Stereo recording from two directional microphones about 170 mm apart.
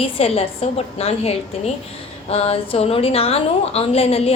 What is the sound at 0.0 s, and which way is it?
A woman's voice, 35° left (ahead or behind).